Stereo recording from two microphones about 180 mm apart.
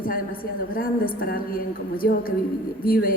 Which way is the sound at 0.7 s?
55° left (ahead or behind).